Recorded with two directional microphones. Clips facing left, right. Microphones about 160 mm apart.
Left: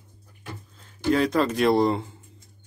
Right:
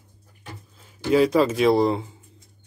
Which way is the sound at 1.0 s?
5° right (ahead or behind).